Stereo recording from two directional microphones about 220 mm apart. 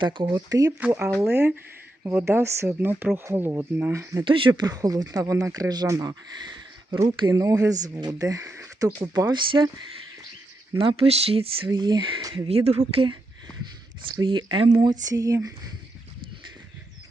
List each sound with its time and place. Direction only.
0.0 s speech: 20° right (ahead or behind)
10.8 s speech: 25° right (ahead or behind)